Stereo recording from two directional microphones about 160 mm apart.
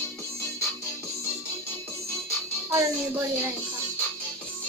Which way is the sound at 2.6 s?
15° right (ahead or behind).